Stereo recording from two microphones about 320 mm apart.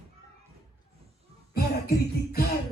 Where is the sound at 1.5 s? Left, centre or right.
Left.